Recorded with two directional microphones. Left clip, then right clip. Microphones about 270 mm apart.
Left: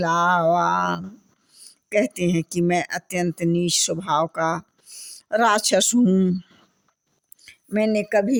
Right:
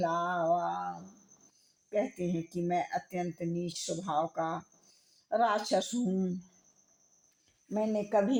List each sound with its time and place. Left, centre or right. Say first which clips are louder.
0.0 s speech: left 12 dB; left
1.9 s speech: left 11 dB; left
7.4 s speech: left 11 dB; left